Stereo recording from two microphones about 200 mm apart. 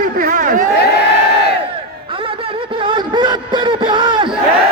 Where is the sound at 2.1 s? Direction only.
25° right (ahead or behind).